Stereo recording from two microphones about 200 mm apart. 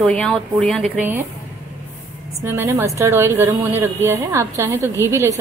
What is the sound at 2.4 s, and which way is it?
A woman's voice, 10° right (ahead or behind).